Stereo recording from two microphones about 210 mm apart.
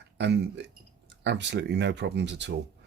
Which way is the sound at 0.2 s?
55° right (ahead or behind).